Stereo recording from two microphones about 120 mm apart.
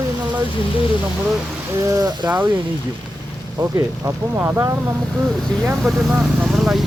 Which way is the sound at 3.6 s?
30° right (ahead or behind).